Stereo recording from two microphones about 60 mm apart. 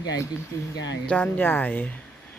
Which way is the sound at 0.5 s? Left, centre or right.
Left.